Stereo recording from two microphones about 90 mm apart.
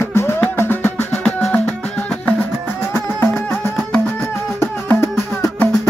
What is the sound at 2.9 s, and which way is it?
Music, 25° left (ahead or behind).